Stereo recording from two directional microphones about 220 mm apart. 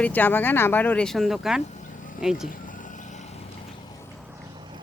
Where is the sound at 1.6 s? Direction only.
35° left (ahead or behind).